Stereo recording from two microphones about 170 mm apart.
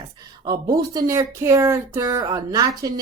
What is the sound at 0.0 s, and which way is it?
Speech, 20° right (ahead or behind).